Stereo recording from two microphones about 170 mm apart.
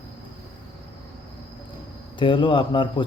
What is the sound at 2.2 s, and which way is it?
Speech, 30° left (ahead or behind).